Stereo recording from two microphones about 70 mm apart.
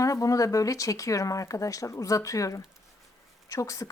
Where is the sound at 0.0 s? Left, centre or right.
Left.